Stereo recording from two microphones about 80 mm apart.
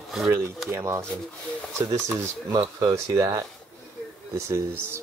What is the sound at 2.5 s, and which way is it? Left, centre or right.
Speech, right.